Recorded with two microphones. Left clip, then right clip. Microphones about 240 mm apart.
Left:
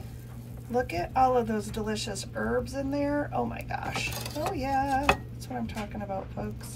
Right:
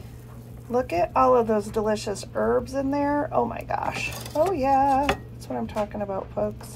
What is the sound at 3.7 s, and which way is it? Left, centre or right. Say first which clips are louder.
Speech: right 5 dB; centre.